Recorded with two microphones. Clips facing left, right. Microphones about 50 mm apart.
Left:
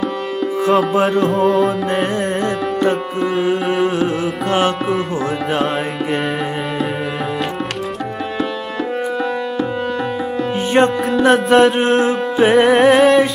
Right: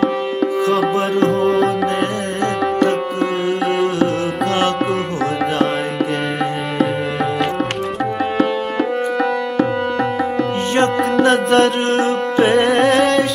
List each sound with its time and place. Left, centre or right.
0.6 s music: left
1.3 s music: centre
3.4 s music: centre
10.7 s music: centre